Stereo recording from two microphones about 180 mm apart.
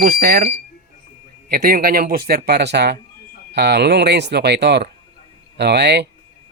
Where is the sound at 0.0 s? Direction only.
55° right (ahead or behind).